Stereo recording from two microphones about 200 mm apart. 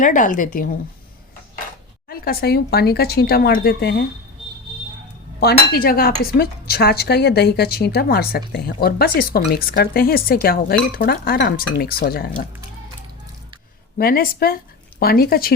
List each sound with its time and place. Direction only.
0.0 s speech: 40° left (ahead or behind)
2.0 s a woman's voice: 50° left (ahead or behind)
5.4 s a woman's voice: 50° left (ahead or behind)
14.0 s a woman's voice: 45° left (ahead or behind)